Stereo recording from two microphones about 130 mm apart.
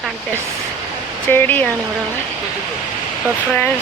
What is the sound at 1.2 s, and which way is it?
Speech, 15° left (ahead or behind).